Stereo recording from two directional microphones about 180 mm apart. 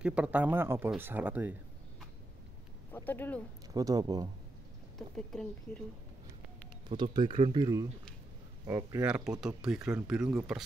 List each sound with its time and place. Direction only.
0.0 s speech: 5° right (ahead or behind)
2.9 s speech: 10° left (ahead or behind)
3.7 s speech: 20° right (ahead or behind)
4.9 s speech: 5° left (ahead or behind)
7.0 s speech: 25° right (ahead or behind)
9.0 s speech: 5° right (ahead or behind)